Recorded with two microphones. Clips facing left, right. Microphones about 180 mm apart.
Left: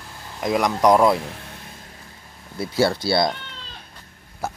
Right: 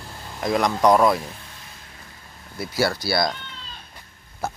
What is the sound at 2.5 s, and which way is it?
Speech, 25° left (ahead or behind).